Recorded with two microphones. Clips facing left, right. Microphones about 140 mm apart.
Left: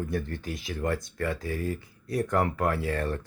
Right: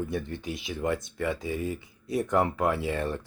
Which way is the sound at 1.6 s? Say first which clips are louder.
Even; 25° right (ahead or behind).